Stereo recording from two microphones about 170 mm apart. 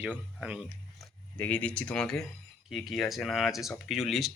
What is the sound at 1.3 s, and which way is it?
Speech, 10° left (ahead or behind).